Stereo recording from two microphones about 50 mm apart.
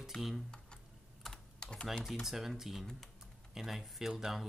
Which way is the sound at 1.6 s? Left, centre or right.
Centre.